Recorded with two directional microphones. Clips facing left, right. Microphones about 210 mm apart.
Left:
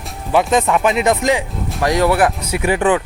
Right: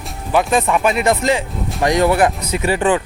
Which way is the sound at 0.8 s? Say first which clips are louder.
Left 1 dB; 20° left (ahead or behind).